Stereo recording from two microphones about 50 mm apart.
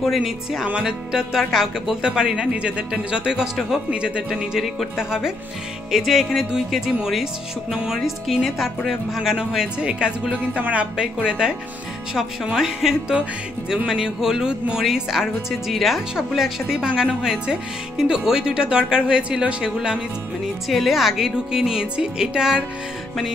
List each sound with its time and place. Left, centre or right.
0.0 s speech: centre; by 4.2 s right
4.9 s speech: centre
10.6 s speech: right
11.2 s speech: centre
20.6 s speech: centre